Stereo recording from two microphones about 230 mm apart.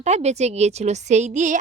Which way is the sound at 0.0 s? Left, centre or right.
Right.